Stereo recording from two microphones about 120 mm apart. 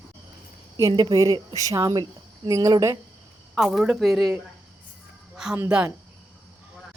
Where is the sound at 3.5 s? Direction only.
Centre (ahead or behind).